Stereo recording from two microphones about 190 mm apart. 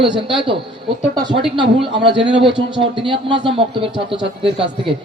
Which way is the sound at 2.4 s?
25° right (ahead or behind).